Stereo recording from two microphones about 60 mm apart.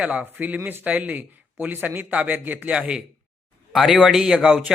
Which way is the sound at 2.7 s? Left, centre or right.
Centre.